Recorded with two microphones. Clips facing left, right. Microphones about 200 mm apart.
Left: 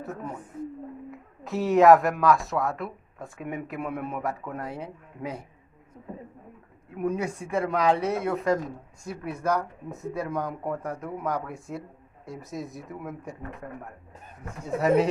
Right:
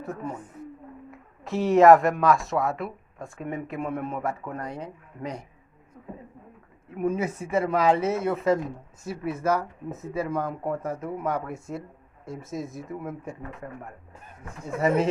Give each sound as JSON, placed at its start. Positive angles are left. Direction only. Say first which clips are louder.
{"t": 0.0, "sound": "speech", "louder": "right 2 dB", "side_deg": 0}
{"t": 6.9, "sound": "speech", "louder": "right 2 dB", "side_deg": 0}